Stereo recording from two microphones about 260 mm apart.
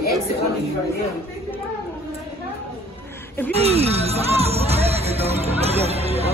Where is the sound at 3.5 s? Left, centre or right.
Right.